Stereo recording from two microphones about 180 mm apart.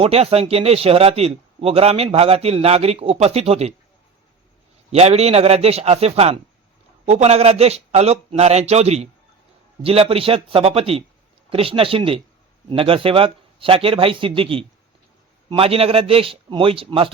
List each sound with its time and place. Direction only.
0.0 s a man's voice: 35° right (ahead or behind)
4.9 s a man's voice: 35° right (ahead or behind)